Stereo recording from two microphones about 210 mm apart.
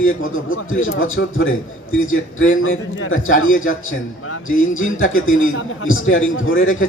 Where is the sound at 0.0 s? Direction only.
75° left (ahead or behind).